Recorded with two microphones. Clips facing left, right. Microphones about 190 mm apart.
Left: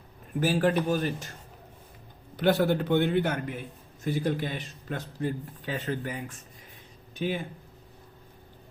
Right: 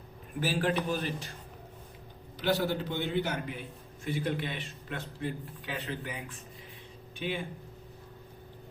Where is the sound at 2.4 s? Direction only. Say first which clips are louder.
Left 6 dB; 55° left (ahead or behind).